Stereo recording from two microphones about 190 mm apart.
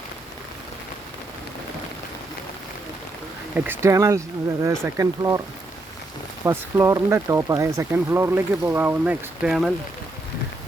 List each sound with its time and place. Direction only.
3.5 s speech: 15° right (ahead or behind)
6.4 s speech: 10° right (ahead or behind)